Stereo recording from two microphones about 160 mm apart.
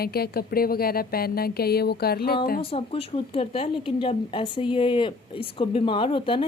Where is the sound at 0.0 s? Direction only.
75° left (ahead or behind).